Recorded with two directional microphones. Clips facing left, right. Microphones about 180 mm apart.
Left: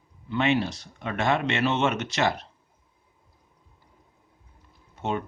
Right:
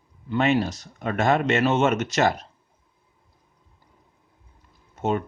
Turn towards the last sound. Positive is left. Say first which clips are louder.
# right 4 dB
turn(degrees=-45)  # may be behind; listen again after turning